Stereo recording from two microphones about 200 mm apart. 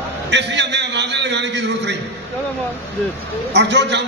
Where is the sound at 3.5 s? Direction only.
60° right (ahead or behind).